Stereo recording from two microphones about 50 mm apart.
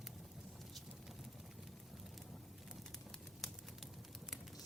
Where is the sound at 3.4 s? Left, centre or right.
Centre.